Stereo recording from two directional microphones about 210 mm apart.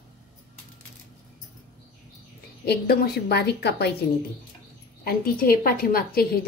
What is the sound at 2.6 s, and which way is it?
A woman's voice, 50° left (ahead or behind).